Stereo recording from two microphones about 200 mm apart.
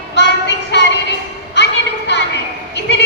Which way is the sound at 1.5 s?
60° left (ahead or behind).